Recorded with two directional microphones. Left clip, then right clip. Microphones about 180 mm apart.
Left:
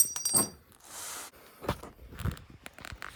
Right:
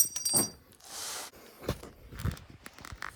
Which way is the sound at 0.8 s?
40° right (ahead or behind).